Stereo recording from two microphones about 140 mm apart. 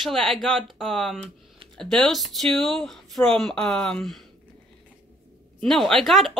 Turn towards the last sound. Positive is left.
turn(degrees=0)  # may be behind; listen again after turning